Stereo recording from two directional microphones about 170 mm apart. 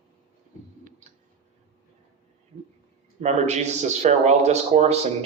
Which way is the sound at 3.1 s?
40° right (ahead or behind).